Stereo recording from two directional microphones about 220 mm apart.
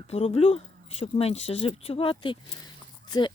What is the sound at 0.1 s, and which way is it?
Speech, 30° left (ahead or behind).